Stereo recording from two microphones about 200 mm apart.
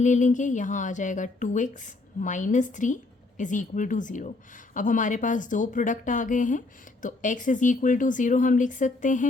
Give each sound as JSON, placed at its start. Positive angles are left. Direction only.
{"t": 0.0, "sound": "a woman's voice", "side_deg": 40}